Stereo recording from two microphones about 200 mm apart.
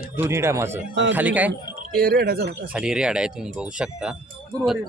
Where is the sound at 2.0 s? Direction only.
50° right (ahead or behind).